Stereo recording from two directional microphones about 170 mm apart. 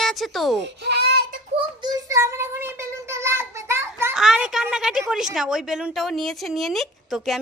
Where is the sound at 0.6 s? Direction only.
80° right.